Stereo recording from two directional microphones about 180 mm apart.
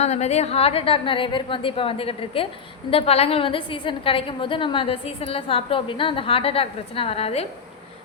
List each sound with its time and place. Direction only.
0.0 s a woman's voice: 40° left (ahead or behind)